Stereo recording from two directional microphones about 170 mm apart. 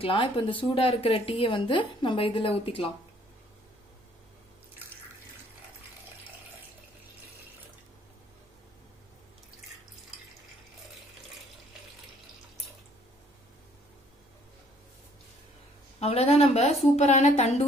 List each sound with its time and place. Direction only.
0.0 s speech: 30° left (ahead or behind)
9.6 s water: centre (ahead or behind)
16.0 s a woman's voice: 35° left (ahead or behind)